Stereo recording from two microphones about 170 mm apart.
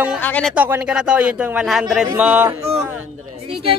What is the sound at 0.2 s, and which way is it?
Speech, 5° left (ahead or behind).